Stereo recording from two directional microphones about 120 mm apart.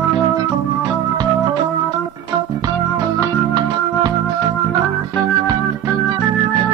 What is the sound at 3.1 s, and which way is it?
Music, 30° right (ahead or behind).